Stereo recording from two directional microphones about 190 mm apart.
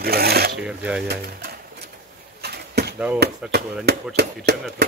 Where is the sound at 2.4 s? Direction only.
55° right (ahead or behind).